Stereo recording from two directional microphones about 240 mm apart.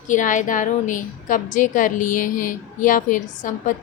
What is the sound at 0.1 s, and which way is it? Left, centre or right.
A woman's voice, left.